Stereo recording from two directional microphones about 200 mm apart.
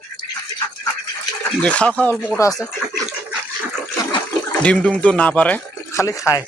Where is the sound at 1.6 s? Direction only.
5° left (ahead or behind).